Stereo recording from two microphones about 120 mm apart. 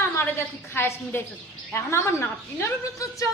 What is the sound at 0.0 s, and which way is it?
A woman's voice, 20° left (ahead or behind).